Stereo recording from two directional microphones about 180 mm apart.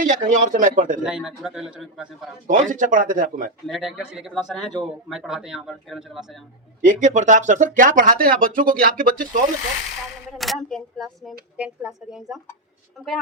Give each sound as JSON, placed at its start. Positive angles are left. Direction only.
{"t": 0.0, "sound": "speech", "side_deg": -45}
{"t": 1.0, "sound": "a man's voice", "side_deg": -5}
{"t": 2.5, "sound": "speech", "side_deg": -45}
{"t": 3.7, "sound": "a man's voice", "side_deg": 0}
{"t": 6.8, "sound": "speech", "side_deg": -45}
{"t": 10.3, "sound": "a man's voice", "side_deg": 0}